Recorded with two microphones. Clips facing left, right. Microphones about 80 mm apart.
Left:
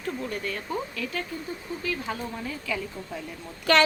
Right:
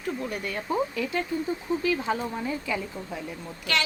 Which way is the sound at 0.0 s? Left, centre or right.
Centre.